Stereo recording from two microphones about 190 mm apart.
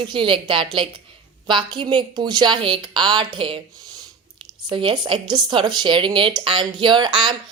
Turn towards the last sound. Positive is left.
turn(degrees=-25)  # may be behind; listen again after turning